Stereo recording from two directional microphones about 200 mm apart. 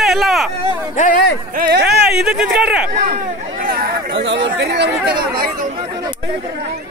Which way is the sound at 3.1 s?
45° right (ahead or behind).